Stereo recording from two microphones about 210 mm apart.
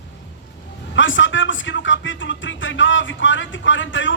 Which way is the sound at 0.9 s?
65° left (ahead or behind).